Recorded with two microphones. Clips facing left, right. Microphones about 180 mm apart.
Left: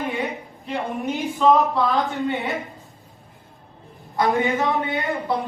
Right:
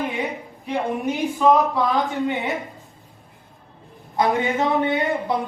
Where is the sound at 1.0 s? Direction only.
Centre (ahead or behind).